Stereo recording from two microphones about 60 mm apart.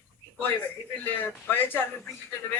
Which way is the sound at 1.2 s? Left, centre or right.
Left.